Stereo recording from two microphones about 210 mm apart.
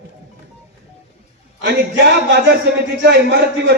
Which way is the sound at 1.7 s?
50° right (ahead or behind).